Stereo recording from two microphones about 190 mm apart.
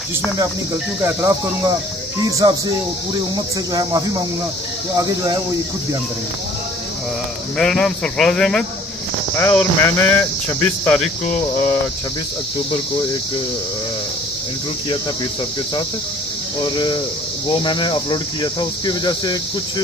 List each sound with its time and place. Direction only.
1.0 s cricket: 15° right (ahead or behind)
2.3 s speech: 20° right (ahead or behind)
4.9 s speech: 20° right (ahead or behind)
7.5 s speech: 5° left (ahead or behind)
16.7 s speech: 25° left (ahead or behind)